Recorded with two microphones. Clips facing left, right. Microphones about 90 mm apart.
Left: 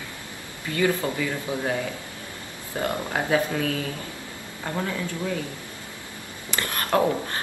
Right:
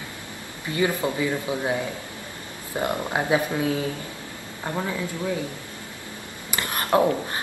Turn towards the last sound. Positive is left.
turn(degrees=-20)  # may be behind; listen again after turning